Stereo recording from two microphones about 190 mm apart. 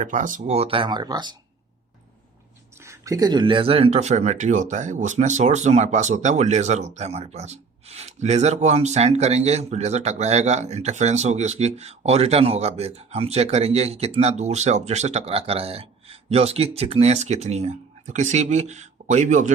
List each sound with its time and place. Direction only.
0.0 s speech: 40° right (ahead or behind); by 1.4 s 20° right (ahead or behind)
2.7 s speech: 15° right (ahead or behind); by 19.5 s 40° right (ahead or behind)